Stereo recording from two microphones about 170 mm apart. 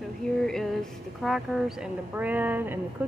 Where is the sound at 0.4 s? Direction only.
Centre (ahead or behind).